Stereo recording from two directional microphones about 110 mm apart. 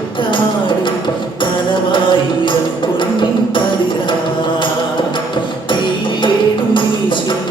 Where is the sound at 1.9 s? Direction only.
50° left (ahead or behind).